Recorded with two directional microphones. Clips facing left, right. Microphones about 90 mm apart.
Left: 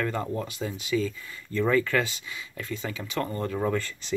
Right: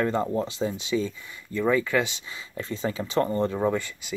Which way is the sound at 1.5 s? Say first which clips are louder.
Right 1 dB; 15° right (ahead or behind).